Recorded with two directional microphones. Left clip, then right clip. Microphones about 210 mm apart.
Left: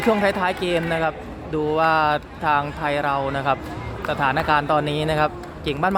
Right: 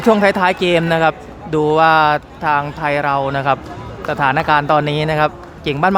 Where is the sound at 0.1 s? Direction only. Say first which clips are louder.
Right 8 dB; 15° right (ahead or behind).